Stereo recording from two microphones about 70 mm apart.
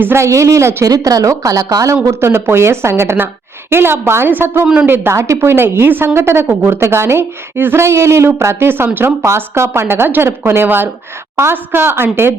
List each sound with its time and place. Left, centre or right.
0.0 s speech: right
0.9 s a woman's voice: right
2.0 s a woman's voice: right